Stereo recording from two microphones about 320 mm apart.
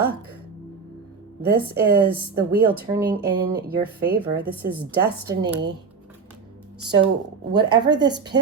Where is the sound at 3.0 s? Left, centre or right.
Right.